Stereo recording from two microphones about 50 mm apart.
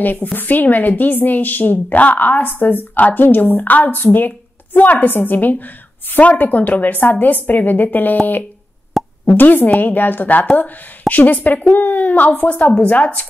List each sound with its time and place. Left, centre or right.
0.0 s a woman's voice: left
9.2 s a woman's voice: left